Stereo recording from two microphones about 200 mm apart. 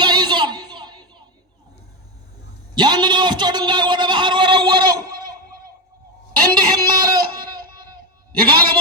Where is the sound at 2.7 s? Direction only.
20° right (ahead or behind).